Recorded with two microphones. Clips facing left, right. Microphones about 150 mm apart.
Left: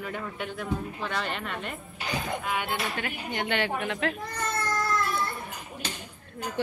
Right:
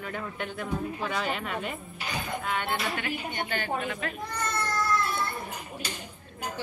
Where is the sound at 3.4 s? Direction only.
75° left (ahead or behind).